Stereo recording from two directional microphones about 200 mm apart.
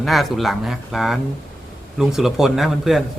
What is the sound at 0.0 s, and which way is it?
A man's voice, centre (ahead or behind).